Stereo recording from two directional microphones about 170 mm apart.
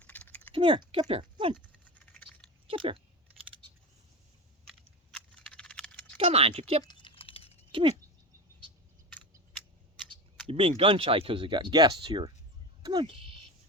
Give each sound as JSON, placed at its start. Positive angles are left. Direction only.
{"t": 0.0, "sound": "typing", "side_deg": 10}
{"t": 0.5, "sound": "speech", "side_deg": -30}
{"t": 1.8, "sound": "patter", "side_deg": 10}
{"t": 2.6, "sound": "speech", "side_deg": -30}
{"t": 5.1, "sound": "keys jangling", "side_deg": 5}
{"t": 6.1, "sound": "speech", "side_deg": -35}
{"t": 6.8, "sound": "typing", "side_deg": 30}
{"t": 7.7, "sound": "speech", "side_deg": -30}
{"t": 10.4, "sound": "speech", "side_deg": -35}